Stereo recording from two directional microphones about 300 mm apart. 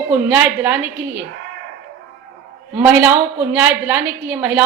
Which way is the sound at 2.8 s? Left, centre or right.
Centre.